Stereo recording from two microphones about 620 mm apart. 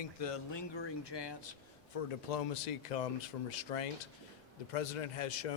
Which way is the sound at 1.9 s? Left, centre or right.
Left.